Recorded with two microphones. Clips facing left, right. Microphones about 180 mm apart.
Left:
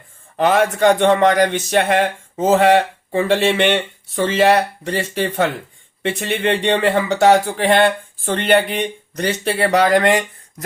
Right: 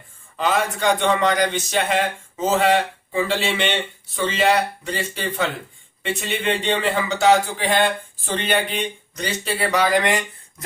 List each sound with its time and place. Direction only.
0.3 s speech: 55° left (ahead or behind)